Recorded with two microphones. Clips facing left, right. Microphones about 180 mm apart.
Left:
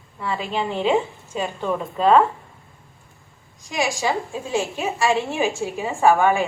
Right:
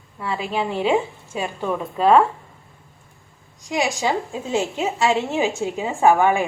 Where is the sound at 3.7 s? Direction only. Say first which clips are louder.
Right 1 dB; 20° right (ahead or behind).